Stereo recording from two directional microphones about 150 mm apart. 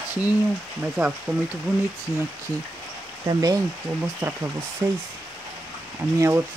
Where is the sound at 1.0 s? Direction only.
5° right (ahead or behind).